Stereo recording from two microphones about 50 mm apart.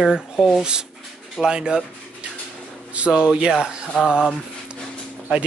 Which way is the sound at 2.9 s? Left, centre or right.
Right.